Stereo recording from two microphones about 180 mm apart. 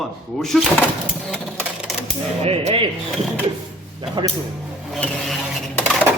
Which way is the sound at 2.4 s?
35° right (ahead or behind).